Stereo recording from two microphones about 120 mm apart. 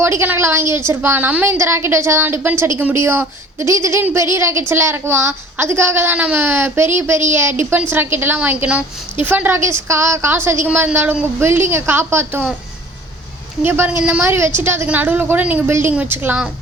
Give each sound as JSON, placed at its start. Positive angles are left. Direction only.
{"t": 0.0, "sound": "a woman's voice", "side_deg": -20}
{"t": 13.7, "sound": "a woman's voice", "side_deg": -20}